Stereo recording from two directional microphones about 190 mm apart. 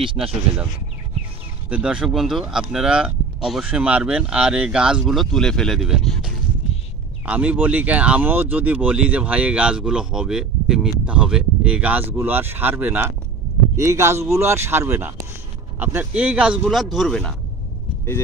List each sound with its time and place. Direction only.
0.0 s speech: 25° right (ahead or behind)
1.7 s speech: 5° right (ahead or behind)